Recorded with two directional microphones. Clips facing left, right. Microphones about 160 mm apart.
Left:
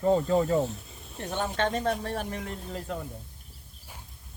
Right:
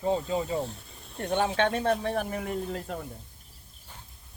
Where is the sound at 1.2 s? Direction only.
60° right (ahead or behind).